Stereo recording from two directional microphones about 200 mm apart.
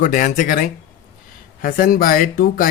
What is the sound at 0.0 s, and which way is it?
Speech, 40° left (ahead or behind).